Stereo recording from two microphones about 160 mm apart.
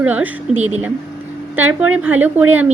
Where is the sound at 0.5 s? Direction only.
45° right (ahead or behind).